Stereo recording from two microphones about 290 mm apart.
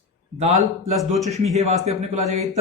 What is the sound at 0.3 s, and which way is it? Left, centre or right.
A man's voice, right.